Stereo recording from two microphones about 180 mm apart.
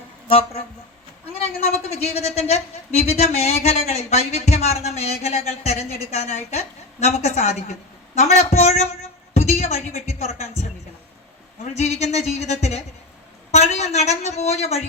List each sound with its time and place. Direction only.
0.3 s a woman's voice: 35° left (ahead or behind)